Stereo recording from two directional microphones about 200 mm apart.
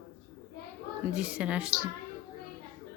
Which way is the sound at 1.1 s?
5° right (ahead or behind).